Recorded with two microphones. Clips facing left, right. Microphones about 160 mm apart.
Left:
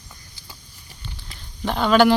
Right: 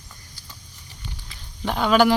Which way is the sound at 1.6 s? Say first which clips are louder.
Left 2 dB; 5° right (ahead or behind).